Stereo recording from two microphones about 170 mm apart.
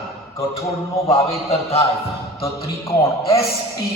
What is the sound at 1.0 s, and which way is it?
Speech, 35° left (ahead or behind).